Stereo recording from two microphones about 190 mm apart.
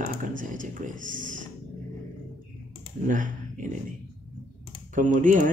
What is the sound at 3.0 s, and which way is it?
Speech, 45° right (ahead or behind).